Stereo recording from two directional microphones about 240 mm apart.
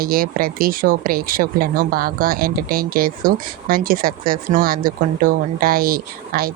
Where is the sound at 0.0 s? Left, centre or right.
Right.